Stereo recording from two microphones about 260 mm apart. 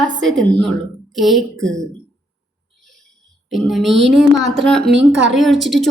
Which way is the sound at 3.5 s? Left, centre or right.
Centre.